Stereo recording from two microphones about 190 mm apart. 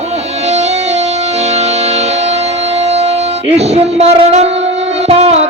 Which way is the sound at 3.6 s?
35° right (ahead or behind).